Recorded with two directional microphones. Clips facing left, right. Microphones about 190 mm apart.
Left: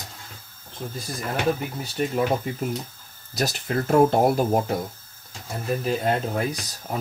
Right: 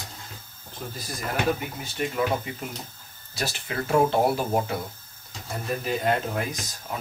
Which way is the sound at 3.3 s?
40° left (ahead or behind).